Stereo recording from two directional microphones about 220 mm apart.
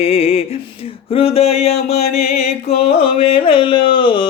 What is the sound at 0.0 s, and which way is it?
Music, 25° left (ahead or behind).